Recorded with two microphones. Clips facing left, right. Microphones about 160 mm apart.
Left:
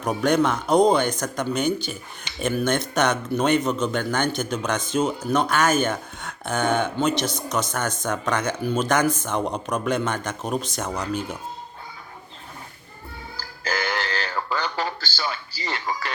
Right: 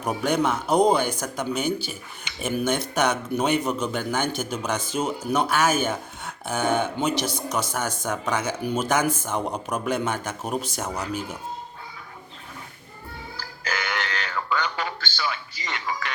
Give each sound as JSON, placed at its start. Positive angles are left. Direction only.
{"t": 0.0, "sound": "speech", "side_deg": -10}
{"t": 13.3, "sound": "music", "side_deg": 35}